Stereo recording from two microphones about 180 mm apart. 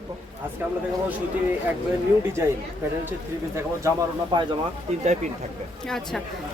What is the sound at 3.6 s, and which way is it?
Speech, 20° right (ahead or behind).